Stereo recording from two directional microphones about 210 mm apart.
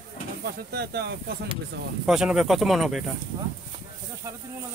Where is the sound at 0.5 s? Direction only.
50° right (ahead or behind).